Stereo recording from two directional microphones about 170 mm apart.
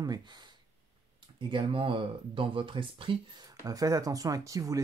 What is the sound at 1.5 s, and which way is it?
Speech, 30° right (ahead or behind).